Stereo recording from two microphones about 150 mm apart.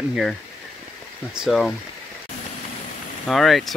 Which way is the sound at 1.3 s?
Centre (ahead or behind).